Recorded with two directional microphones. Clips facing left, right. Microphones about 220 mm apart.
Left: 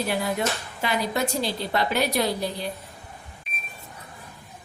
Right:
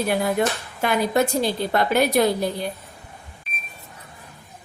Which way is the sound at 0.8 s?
50° right (ahead or behind).